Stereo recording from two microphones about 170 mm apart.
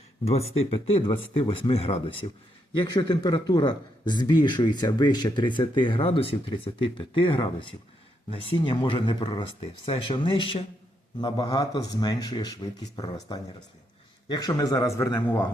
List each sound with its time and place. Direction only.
0.3 s speech: 35° left (ahead or behind); by 15.4 s 20° left (ahead or behind)